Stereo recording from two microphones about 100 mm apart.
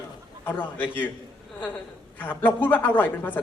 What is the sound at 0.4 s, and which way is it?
A woman's voice, 20° left (ahead or behind).